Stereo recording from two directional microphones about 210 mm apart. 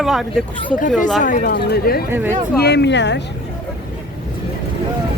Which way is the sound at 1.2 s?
40° left (ahead or behind).